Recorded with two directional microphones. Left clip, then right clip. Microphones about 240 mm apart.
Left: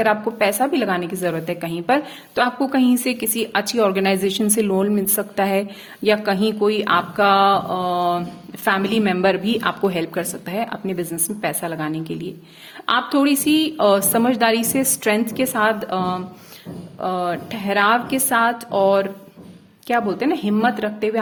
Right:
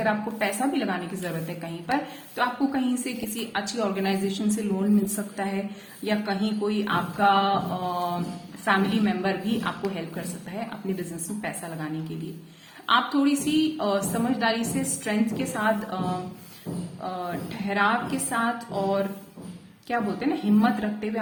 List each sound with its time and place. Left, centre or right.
0.0 s a woman's voice: left